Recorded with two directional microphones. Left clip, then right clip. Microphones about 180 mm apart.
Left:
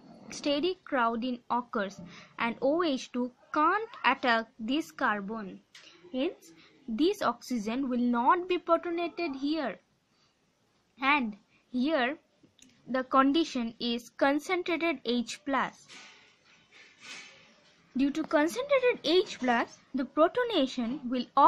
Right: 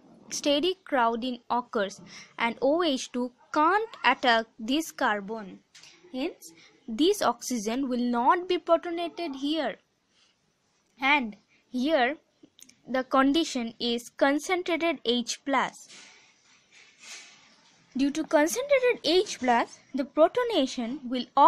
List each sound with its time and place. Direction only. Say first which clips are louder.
0.3 s speech: right 4 dB; 40° right (ahead or behind)
11.0 s a woman's voice: right 3 dB; 35° right (ahead or behind)
17.9 s speech: right 3 dB; 35° right (ahead or behind)